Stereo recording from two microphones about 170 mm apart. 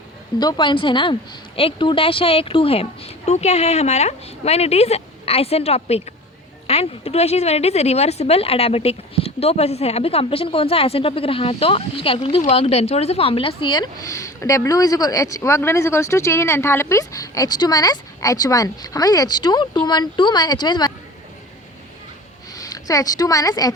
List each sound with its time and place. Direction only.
0.3 s speech: 25° left (ahead or behind)
22.5 s a woman's voice: 20° left (ahead or behind)